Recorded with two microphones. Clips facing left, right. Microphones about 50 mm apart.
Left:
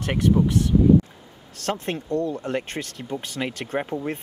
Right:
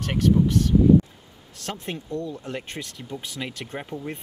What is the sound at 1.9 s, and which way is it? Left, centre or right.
Speech, centre.